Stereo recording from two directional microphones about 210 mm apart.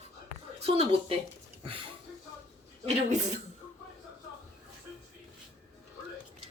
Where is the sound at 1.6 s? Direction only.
25° right (ahead or behind).